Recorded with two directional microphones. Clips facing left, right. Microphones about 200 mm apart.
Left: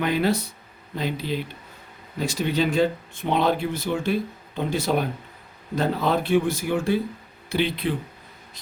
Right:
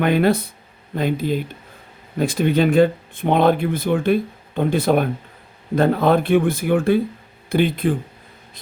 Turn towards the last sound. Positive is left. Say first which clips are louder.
# right 6 dB
turn(degrees=-50)  # may be behind; listen again after turning